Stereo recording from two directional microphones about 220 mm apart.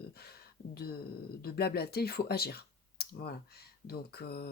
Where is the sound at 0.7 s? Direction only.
45° left (ahead or behind).